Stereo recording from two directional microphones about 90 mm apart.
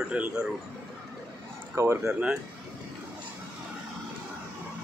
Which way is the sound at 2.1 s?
10° right (ahead or behind).